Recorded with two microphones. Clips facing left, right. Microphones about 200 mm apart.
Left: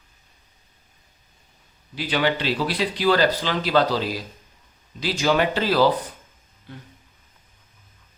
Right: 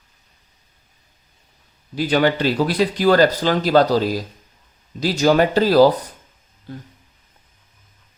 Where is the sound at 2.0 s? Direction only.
45° right (ahead or behind).